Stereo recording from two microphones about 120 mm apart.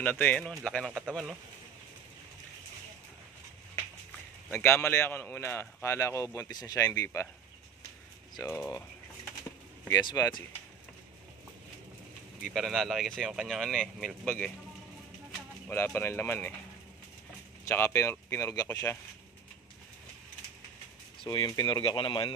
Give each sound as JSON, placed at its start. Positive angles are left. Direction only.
{"t": 0.0, "sound": "speech", "side_deg": 15}
{"t": 4.5, "sound": "a man's voice", "side_deg": 20}
{"t": 8.5, "sound": "a man's voice", "side_deg": 20}
{"t": 9.9, "sound": "speech", "side_deg": 30}
{"t": 12.4, "sound": "speech", "side_deg": 0}
{"t": 15.7, "sound": "a man's voice", "side_deg": 20}
{"t": 17.6, "sound": "a man's voice", "side_deg": 20}
{"t": 18.7, "sound": "speech", "side_deg": 15}
{"t": 21.3, "sound": "speech", "side_deg": 35}